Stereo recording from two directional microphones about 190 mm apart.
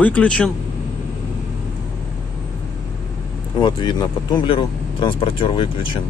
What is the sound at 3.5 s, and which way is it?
Speech, 25° left (ahead or behind).